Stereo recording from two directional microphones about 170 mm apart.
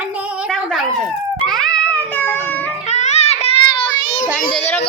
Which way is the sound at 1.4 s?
5° left (ahead or behind).